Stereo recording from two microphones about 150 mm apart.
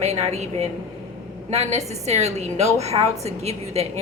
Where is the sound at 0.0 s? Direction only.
45° right (ahead or behind).